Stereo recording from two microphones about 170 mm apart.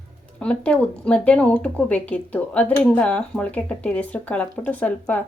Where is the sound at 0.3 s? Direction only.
5° left (ahead or behind).